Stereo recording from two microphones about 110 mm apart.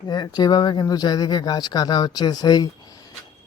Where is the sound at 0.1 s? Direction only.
40° left (ahead or behind).